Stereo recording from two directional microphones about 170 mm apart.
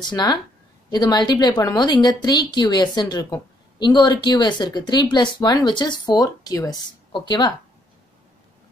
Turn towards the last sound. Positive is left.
turn(degrees=25)  # may be behind; listen again after turning